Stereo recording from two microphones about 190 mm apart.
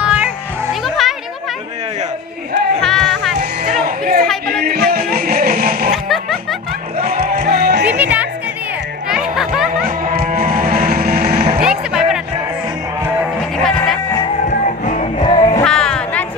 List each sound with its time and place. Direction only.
0.0 s music: 5° right (ahead or behind)
2.8 s music: 5° left (ahead or behind)
3.3 s music: 45° right (ahead or behind)
7.2 s music: 50° right (ahead or behind)
8.0 s music: 10° right (ahead or behind)
9.8 s music: 50° right (ahead or behind)
11.6 s music: 5° right (ahead or behind)
13.7 s music: 5° left (ahead or behind)
14.6 s music: 40° left (ahead or behind)
15.2 s music: 25° left (ahead or behind)
15.6 s music: 5° left (ahead or behind)